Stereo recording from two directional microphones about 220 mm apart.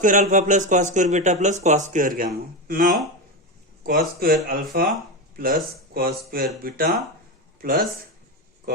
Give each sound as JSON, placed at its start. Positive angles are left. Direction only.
{"t": 0.0, "sound": "speech", "side_deg": -35}